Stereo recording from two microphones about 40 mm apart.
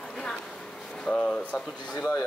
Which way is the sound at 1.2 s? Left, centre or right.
Left.